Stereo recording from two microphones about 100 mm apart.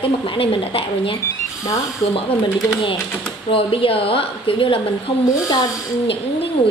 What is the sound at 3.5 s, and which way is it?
A woman's voice, 65° left (ahead or behind).